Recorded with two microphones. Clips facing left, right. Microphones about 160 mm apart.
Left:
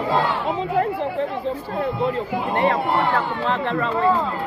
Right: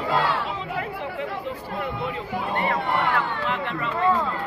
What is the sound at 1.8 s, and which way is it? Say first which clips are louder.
Speech: left 8 dB; 40° left (ahead or behind).